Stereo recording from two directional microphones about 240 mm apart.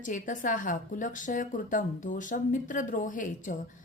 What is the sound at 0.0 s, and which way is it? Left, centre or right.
A woman's voice, left.